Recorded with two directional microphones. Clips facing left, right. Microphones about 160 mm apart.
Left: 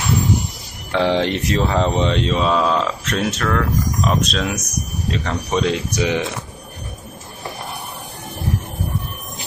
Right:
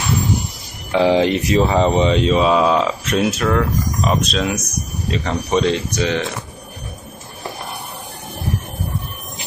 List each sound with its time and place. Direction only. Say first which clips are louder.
0.9 s speech: right 3 dB; 5° right (ahead or behind); by 6.2 s 10° left (ahead or behind)